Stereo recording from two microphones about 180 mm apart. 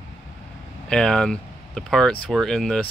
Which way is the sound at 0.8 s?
5° left (ahead or behind).